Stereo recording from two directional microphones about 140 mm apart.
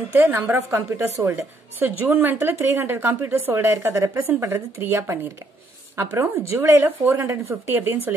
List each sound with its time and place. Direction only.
0.1 s a woman's voice: 15° right (ahead or behind)